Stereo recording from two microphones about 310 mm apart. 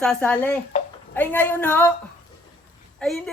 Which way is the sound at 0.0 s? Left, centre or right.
Centre.